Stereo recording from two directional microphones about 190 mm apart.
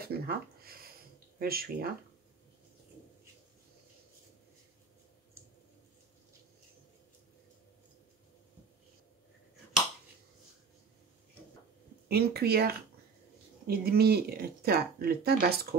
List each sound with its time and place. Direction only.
0.0 s speech: 55° right (ahead or behind)
12.1 s speech: 55° right (ahead or behind)